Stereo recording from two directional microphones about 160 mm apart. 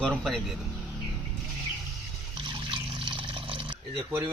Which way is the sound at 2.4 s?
30° right (ahead or behind).